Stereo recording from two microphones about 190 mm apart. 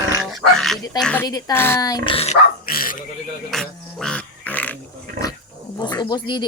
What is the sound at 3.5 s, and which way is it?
Dog, centre (ahead or behind).